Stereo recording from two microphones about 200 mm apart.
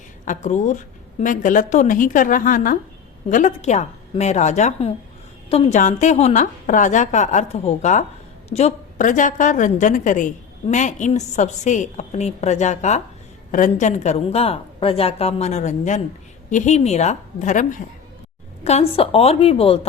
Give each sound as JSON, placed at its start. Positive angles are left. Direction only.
{"t": 0.3, "sound": "a woman's voice", "side_deg": 35}